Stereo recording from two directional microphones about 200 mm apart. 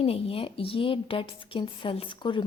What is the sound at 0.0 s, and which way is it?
A woman's voice, 30° left (ahead or behind).